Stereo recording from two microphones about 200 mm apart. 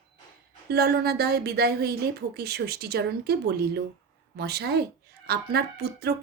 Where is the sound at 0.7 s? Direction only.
50° right (ahead or behind).